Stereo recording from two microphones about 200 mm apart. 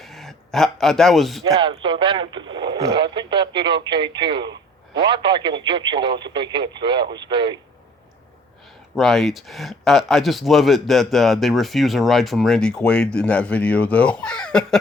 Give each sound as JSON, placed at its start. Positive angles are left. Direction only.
{"t": 0.0, "sound": "a man's voice", "side_deg": 0}
{"t": 1.5, "sound": "speech", "side_deg": -25}
{"t": 9.0, "sound": "speech", "side_deg": 0}